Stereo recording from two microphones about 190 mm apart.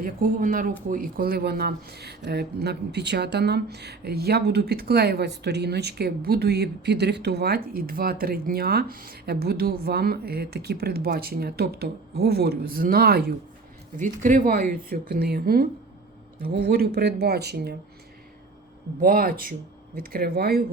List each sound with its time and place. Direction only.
0.0 s speech: 45° right (ahead or behind)
13.9 s speech: 45° right (ahead or behind); by 17.7 s 60° right (ahead or behind)
18.9 s speech: 50° right (ahead or behind)